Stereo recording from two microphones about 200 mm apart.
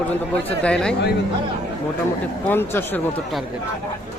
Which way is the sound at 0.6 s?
5° left (ahead or behind).